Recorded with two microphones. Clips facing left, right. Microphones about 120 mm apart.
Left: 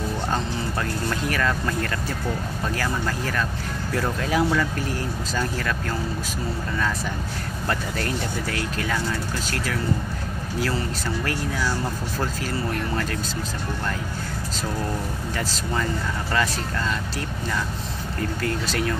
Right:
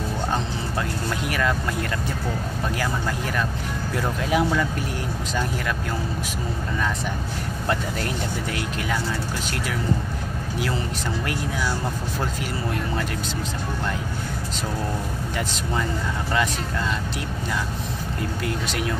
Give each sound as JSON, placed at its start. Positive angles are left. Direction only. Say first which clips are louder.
{"t": 1.2, "sound": "speech", "louder": "right 1 dB", "side_deg": -15}
{"t": 3.9, "sound": "speech", "louder": "even", "side_deg": -20}
{"t": 7.6, "sound": "speech", "louder": "right 1 dB", "side_deg": -20}
{"t": 18.4, "sound": "speech", "louder": "left 2 dB", "side_deg": -15}